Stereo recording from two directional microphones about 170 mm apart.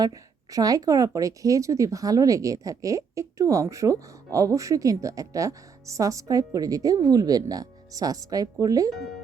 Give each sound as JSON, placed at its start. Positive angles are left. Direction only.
{"t": 0.0, "sound": "speech", "side_deg": -20}